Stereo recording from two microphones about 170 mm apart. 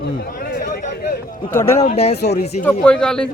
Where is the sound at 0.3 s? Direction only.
60° left (ahead or behind).